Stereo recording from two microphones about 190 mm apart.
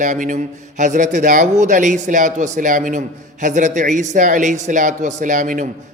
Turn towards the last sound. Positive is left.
turn(degrees=-45)  # may be behind; listen again after turning